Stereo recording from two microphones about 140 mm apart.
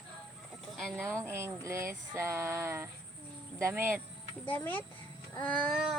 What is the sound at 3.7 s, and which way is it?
Speech, 15° right (ahead or behind).